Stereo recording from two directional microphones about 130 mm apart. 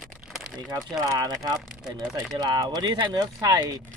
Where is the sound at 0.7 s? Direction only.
25° right (ahead or behind).